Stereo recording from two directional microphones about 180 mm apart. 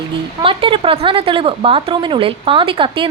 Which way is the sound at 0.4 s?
30° right (ahead or behind).